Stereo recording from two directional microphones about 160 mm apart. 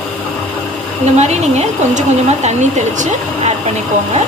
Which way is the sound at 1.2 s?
45° right (ahead or behind).